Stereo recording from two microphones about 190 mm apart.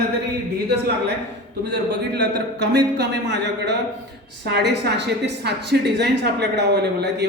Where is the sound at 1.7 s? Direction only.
65° right (ahead or behind).